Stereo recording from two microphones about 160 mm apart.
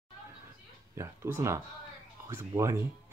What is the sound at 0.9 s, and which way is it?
Speech, 15° right (ahead or behind).